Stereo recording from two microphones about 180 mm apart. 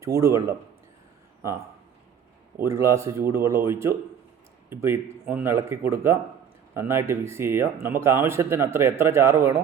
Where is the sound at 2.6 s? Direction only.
15° right (ahead or behind).